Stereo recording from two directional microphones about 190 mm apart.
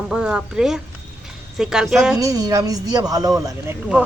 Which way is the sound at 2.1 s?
20° right (ahead or behind).